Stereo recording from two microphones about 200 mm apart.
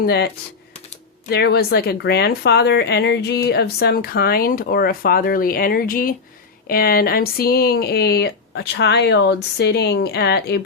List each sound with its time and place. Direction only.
0.0 s speech: 55° left (ahead or behind)
1.3 s speech: 55° left (ahead or behind)